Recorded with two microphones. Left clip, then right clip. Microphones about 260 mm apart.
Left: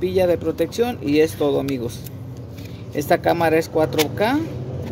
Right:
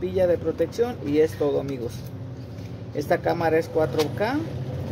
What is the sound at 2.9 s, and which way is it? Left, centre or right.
Speech, left.